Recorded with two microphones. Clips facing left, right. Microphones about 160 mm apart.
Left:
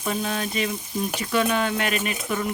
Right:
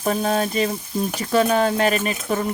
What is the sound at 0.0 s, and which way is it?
Speech, 45° right (ahead or behind).